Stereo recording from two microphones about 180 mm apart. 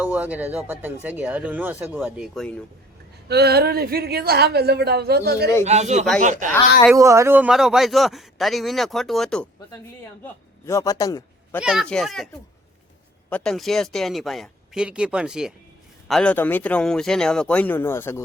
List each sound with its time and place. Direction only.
0.0 s speech: 10° right (ahead or behind)
3.2 s a woman's voice: 65° right (ahead or behind)
5.6 s a man's voice: 40° right (ahead or behind)
6.9 s a man's voice: 15° right (ahead or behind); by 9.5 s 5° left (ahead or behind)
10.7 s speech: 20° left (ahead or behind)
11.6 s a man's voice: centre (ahead or behind)
13.3 s a man's voice: 5° left (ahead or behind)